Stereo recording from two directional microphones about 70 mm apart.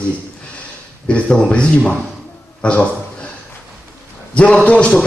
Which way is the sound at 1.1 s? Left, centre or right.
Centre.